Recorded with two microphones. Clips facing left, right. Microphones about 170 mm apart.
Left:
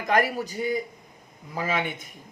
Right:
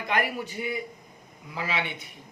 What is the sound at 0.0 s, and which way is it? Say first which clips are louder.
Speech: left 4 dB; 40° left (ahead or behind).